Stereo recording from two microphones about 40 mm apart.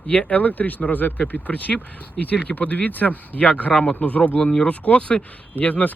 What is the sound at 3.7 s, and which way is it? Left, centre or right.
Speech, left.